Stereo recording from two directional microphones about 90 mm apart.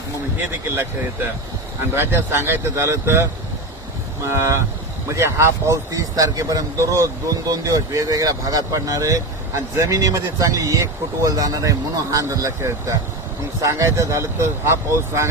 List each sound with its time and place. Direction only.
2.0 s speech: 25° right (ahead or behind)